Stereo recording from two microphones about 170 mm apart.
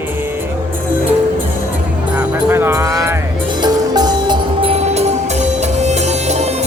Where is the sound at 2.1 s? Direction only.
15° right (ahead or behind).